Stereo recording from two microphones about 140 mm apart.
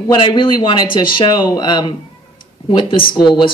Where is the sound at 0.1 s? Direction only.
35° left (ahead or behind).